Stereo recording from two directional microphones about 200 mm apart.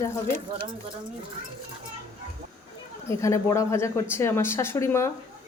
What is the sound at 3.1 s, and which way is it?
Speech, 15° left (ahead or behind).